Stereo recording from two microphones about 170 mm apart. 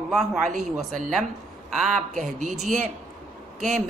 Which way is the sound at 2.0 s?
45° right (ahead or behind).